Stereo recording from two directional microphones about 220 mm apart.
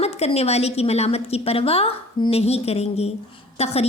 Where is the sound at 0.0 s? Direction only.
30° left (ahead or behind).